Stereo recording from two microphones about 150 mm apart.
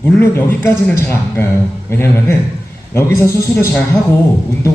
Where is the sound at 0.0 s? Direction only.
15° left (ahead or behind).